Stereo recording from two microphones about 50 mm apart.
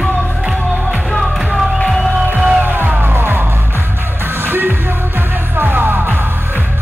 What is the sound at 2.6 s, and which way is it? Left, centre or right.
Music, right.